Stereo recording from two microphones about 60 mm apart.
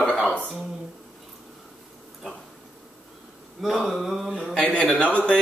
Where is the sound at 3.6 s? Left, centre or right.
Centre.